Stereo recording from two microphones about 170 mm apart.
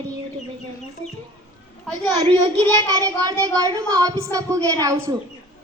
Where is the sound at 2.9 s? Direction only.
20° right (ahead or behind).